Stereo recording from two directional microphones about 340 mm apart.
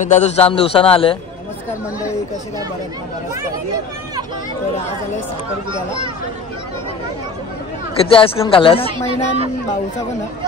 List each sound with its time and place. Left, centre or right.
0.1 s a man's voice: centre
8.0 s a man's voice: centre
8.9 s speech: centre